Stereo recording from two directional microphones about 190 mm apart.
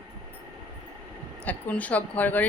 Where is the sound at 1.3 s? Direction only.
10° left (ahead or behind).